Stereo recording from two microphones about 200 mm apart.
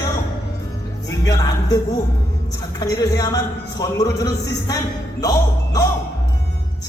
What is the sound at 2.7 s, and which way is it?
A man's voice, 20° left (ahead or behind).